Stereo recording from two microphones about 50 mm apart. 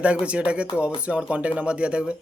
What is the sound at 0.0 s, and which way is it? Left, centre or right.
Speech, right.